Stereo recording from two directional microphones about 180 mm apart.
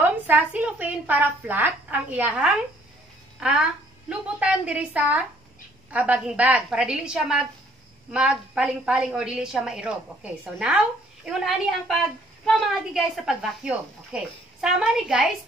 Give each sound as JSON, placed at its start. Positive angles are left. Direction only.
{"t": 0.0, "sound": "a woman's voice", "side_deg": -10}